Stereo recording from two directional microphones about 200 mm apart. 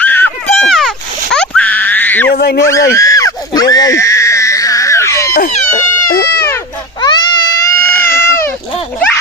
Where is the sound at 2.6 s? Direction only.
15° left (ahead or behind).